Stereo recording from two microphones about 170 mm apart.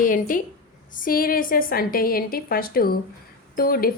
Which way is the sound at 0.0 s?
50° left (ahead or behind).